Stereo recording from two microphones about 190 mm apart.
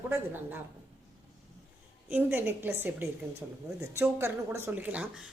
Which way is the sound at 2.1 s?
10° right (ahead or behind).